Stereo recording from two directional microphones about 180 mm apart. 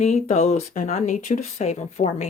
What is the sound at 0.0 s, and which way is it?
Speech, 40° left (ahead or behind).